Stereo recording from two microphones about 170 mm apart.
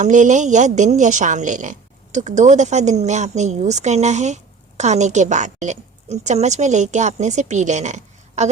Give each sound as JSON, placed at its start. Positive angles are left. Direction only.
{"t": 0.0, "sound": "a woman's voice", "side_deg": -45}